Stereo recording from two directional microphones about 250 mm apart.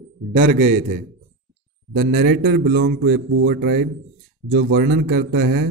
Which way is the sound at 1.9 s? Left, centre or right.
Right.